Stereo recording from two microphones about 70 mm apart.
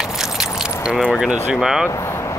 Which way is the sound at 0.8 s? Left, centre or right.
Centre.